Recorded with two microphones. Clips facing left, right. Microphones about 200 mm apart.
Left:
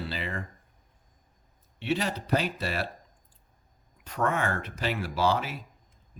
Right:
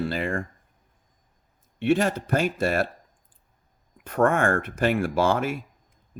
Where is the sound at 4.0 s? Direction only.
50° right (ahead or behind).